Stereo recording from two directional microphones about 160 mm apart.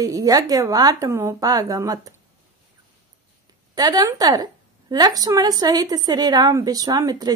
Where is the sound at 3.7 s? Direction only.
25° right (ahead or behind).